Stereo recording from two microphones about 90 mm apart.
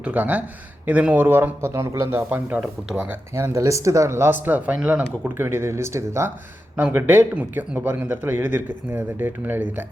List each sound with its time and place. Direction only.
0.0 s speech: 15° right (ahead or behind); by 2.0 s 35° right (ahead or behind)
2.0 s speech: 20° right (ahead or behind)
3.3 s speech: 30° right (ahead or behind); by 5.0 s 15° right (ahead or behind)
5.3 s speech: 25° right (ahead or behind)
6.7 s speech: 20° right (ahead or behind)